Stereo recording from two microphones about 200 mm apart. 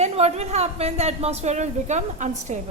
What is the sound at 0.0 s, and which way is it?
A woman's voice, 30° right (ahead or behind).